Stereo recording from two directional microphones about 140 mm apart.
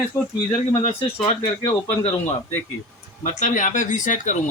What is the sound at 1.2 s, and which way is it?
Speech, 45° left (ahead or behind).